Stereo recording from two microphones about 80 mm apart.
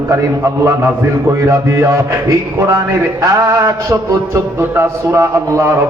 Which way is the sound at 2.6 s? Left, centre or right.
Right.